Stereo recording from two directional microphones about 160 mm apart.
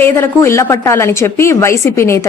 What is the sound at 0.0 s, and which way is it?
A woman's voice, 15° left (ahead or behind).